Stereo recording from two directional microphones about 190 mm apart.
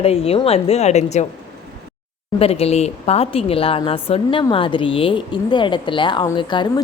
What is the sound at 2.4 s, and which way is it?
Speech, 30° left (ahead or behind).